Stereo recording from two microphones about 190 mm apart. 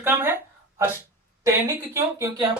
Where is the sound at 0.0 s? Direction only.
10° right (ahead or behind).